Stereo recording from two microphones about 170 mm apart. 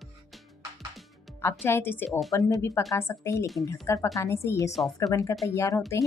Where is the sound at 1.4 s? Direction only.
15° left (ahead or behind).